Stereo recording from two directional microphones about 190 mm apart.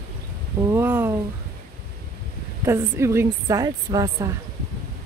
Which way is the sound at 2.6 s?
15° right (ahead or behind).